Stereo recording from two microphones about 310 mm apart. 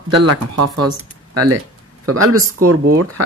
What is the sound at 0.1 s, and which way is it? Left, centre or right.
Speech, right.